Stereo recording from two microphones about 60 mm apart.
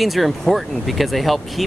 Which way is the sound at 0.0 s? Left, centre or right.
Centre.